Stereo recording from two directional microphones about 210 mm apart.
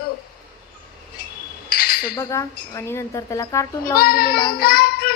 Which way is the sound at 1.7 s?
45° left (ahead or behind).